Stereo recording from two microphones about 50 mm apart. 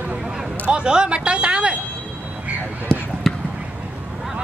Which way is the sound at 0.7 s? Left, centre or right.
Centre.